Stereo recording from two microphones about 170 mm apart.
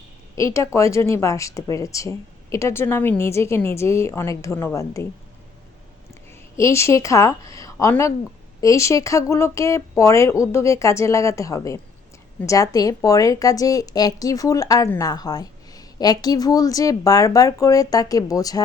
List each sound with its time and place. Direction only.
0.3 s speech: 15° left (ahead or behind)
6.6 s a woman's voice: 15° left (ahead or behind)